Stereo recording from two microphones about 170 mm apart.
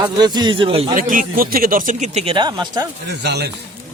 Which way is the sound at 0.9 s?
55° right (ahead or behind).